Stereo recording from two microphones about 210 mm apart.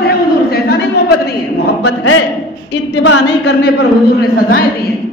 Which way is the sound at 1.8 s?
65° left (ahead or behind).